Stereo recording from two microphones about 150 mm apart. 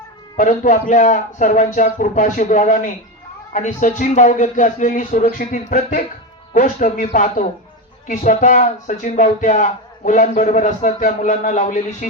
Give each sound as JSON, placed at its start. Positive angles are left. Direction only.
{"t": 0.3, "sound": "speech", "side_deg": 60}